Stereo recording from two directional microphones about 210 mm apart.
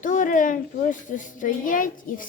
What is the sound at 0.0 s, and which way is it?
Speech, 40° left (ahead or behind).